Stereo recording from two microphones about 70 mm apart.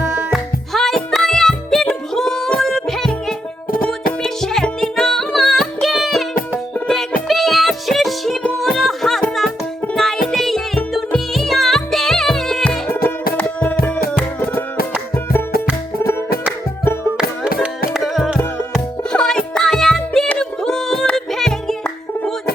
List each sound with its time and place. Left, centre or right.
0.3 s music: centre
13.6 s music: left
17.2 s music: centre
18.0 s music: centre